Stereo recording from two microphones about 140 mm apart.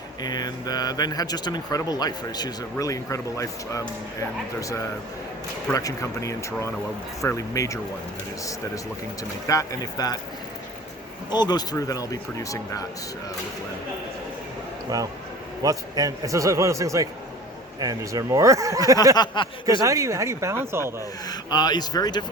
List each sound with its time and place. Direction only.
0.2 s speech: 30° left (ahead or behind)
5.7 s speech: 25° left (ahead or behind)
9.5 s speech: 25° left (ahead or behind)
11.3 s speech: 30° left (ahead or behind)
14.9 s a man's voice: 25° right (ahead or behind)
19.1 s speech: 30° left (ahead or behind)
19.8 s a man's voice: 20° right (ahead or behind)
21.2 s speech: 30° left (ahead or behind)